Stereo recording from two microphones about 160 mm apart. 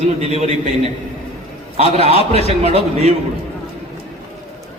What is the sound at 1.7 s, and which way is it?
Speech, 40° right (ahead or behind).